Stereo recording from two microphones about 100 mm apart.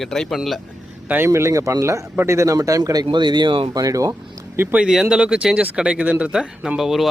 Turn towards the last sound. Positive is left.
turn(degrees=-5)  # may be behind; listen again after turning